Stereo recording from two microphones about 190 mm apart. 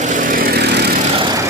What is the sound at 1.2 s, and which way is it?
Vehicle, 20° right (ahead or behind).